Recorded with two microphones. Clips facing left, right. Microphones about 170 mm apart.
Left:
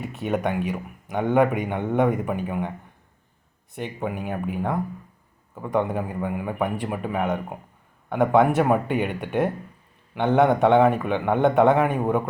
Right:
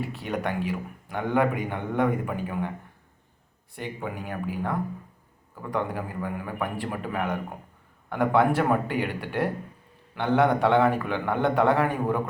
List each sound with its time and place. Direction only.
0.0 s speech: 20° left (ahead or behind)
3.8 s speech: 20° left (ahead or behind)